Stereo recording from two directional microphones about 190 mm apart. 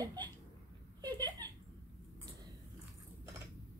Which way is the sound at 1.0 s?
20° right (ahead or behind).